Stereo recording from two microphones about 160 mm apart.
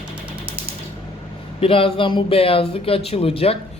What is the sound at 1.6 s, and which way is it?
Speech, 35° left (ahead or behind).